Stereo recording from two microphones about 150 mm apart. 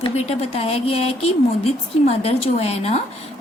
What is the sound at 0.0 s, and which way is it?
A woman's voice, 45° left (ahead or behind).